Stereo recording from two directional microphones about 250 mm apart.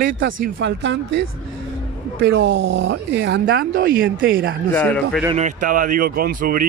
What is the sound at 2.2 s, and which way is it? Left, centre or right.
Speech, right.